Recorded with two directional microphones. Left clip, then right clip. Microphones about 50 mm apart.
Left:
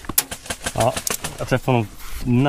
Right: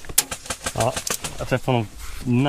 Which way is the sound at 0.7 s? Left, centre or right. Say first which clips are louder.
Left 3 dB; left.